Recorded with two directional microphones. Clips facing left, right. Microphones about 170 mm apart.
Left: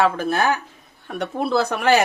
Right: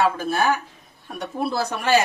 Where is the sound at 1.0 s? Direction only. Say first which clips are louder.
Left 2 dB; 65° left (ahead or behind).